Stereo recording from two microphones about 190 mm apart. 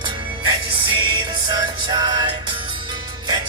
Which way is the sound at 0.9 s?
25° right (ahead or behind).